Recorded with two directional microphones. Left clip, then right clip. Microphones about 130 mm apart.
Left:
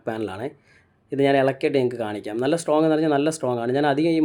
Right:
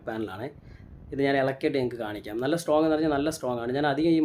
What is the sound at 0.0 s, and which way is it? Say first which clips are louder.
Speech: left 5 dB; 55° left (ahead or behind).